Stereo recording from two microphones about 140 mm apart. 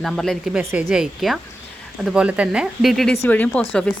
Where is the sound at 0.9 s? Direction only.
5° right (ahead or behind).